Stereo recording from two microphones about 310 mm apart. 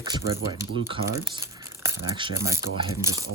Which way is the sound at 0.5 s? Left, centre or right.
Centre.